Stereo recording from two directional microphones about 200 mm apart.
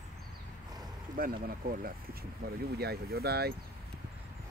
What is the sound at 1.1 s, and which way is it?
Speech, 45° right (ahead or behind).